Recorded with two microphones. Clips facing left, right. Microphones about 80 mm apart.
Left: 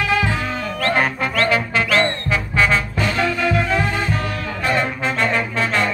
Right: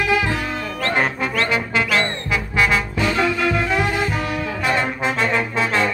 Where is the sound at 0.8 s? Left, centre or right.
Right; by 3.8 s centre.